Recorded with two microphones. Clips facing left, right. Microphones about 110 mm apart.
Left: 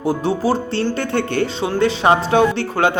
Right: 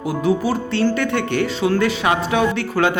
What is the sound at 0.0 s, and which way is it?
Speech, 35° left (ahead or behind).